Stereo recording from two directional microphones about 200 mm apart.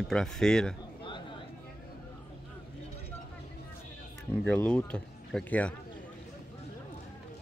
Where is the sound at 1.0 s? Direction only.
25° left (ahead or behind).